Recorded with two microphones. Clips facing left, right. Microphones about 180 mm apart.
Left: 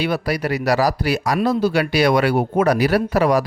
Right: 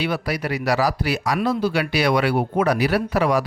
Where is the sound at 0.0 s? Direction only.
40° left (ahead or behind).